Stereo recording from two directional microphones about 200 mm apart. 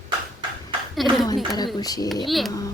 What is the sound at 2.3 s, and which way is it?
Speech, centre (ahead or behind).